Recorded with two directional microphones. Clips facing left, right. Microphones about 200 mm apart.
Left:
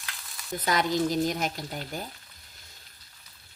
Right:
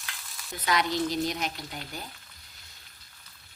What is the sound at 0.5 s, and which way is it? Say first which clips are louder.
A woman's voice: left 2 dB; 45° left (ahead or behind).